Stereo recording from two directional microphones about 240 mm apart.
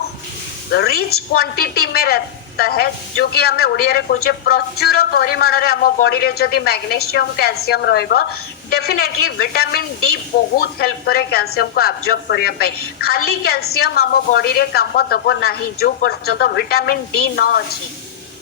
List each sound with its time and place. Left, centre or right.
0.7 s a woman's voice: left